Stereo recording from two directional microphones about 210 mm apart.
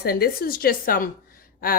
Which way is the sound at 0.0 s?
45° left (ahead or behind).